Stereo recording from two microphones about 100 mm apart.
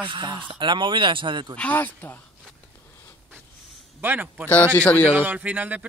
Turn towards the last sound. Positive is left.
turn(degrees=-15)  # may be behind; listen again after turning